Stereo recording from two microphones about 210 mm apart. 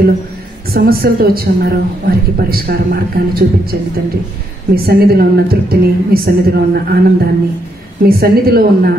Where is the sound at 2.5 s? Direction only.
45° right (ahead or behind).